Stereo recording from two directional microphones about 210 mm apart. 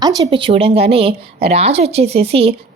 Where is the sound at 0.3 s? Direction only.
25° right (ahead or behind).